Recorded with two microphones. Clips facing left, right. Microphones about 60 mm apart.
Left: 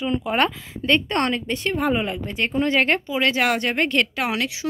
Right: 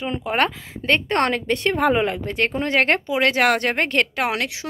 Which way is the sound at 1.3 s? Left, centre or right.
Right.